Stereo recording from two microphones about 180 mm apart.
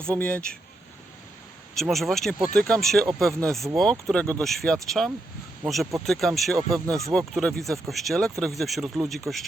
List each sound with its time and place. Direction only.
0.2 s speech: 10° left (ahead or behind)
1.7 s speech: centre (ahead or behind)
6.6 s speech: 20° right (ahead or behind)
7.1 s speech: centre (ahead or behind)